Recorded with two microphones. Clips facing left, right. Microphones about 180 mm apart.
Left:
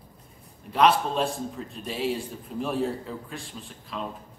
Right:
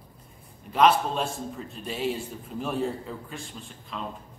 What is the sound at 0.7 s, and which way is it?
A man's voice, centre (ahead or behind).